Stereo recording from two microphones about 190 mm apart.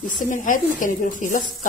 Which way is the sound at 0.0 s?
45° left (ahead or behind).